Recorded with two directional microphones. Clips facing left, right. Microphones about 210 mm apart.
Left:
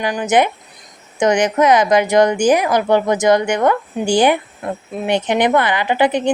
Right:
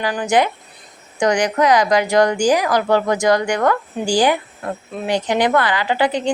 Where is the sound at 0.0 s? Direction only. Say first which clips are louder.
Left 2 dB; 20° left (ahead or behind).